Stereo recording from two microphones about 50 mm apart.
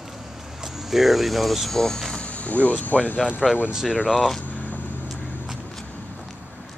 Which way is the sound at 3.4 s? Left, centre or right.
Centre.